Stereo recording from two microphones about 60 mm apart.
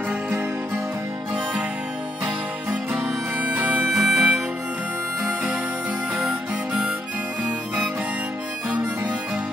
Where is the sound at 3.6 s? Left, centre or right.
Right.